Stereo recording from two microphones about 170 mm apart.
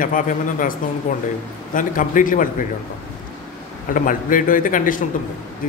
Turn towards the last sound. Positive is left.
turn(degrees=50)  # may be behind; listen again after turning